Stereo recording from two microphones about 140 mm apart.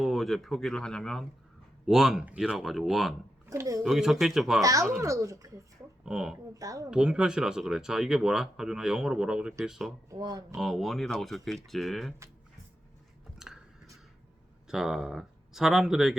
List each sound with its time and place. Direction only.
0.0 s speech: centre (ahead or behind)
3.5 s a child's voice: 20° right (ahead or behind)
3.8 s speech: centre (ahead or behind)
4.6 s a child's voice: 25° right (ahead or behind)
6.1 s speech: 5° right (ahead or behind)
6.5 s a child's voice: 25° right (ahead or behind)
6.9 s speech: 5° right (ahead or behind)
10.1 s a child's voice: 25° right (ahead or behind)
10.5 s speech: centre (ahead or behind)
13.4 s a sound: 5° right (ahead or behind)
14.7 s speech: 5° right (ahead or behind)